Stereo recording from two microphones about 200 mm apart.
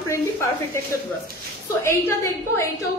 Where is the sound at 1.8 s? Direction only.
10° left (ahead or behind).